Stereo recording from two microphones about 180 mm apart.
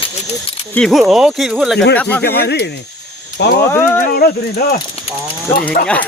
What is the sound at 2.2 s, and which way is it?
Speech, 60° left (ahead or behind).